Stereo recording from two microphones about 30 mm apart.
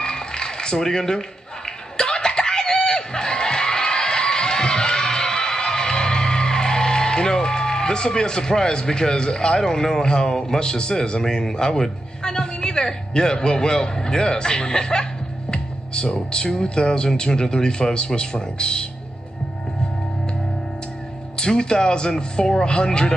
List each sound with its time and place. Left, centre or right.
0.0 s music: left
2.0 s a sound: left
12.2 s a man's voice: left
15.5 s music: left
16.3 s speech: left
21.4 s speech: left